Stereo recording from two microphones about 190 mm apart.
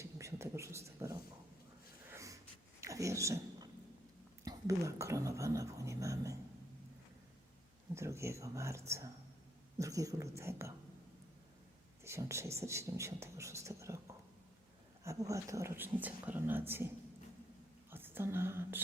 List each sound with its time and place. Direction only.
0.0 s a sound: 15° right (ahead or behind)
2.8 s dog: 15° right (ahead or behind)
4.4 s whispering: 15° right (ahead or behind)
7.9 s speech: 15° right (ahead or behind)
12.0 s speech: 15° right (ahead or behind)
15.0 s speech: 15° right (ahead or behind)
17.9 s speech: 10° right (ahead or behind)